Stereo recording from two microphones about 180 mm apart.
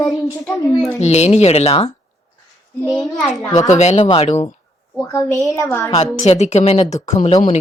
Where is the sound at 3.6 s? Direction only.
40° left (ahead or behind).